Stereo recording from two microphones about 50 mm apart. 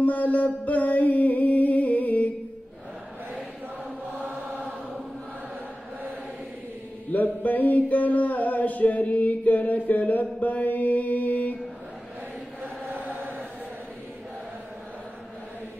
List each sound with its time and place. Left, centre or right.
0.0 s music: left
4.3 s chant: right
7.1 s mantra: left
7.4 s a sound: left
12.9 s chant: right